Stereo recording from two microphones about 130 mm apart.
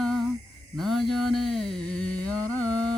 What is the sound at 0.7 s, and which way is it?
Mantra, centre (ahead or behind).